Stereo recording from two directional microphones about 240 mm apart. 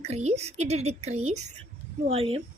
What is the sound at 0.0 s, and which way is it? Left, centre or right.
Speech, right.